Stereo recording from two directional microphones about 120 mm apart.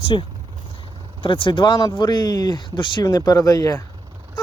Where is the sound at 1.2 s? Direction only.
45° left (ahead or behind); by 3.8 s 30° left (ahead or behind).